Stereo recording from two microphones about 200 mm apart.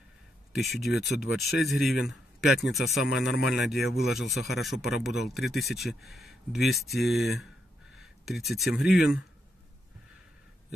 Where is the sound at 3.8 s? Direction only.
55° left (ahead or behind).